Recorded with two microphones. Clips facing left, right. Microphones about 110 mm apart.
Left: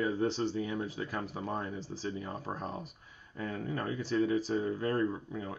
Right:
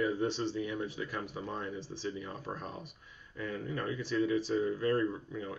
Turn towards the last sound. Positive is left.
turn(degrees=35)  # may be behind; listen again after turning